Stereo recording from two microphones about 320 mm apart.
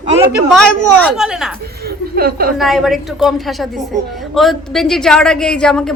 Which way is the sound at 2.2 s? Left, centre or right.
Right.